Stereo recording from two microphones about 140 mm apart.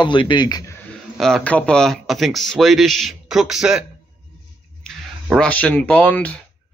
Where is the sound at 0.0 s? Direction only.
35° left (ahead or behind).